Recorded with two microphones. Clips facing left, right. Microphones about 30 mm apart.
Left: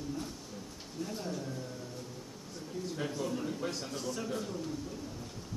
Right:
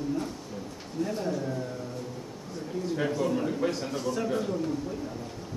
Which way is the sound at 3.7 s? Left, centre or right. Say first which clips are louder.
Right 7 dB; centre.